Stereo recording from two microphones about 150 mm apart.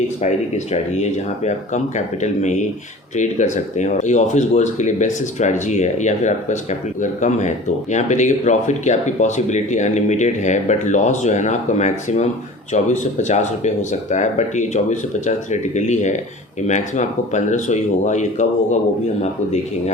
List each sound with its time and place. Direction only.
0.2 s speech: 50° left (ahead or behind)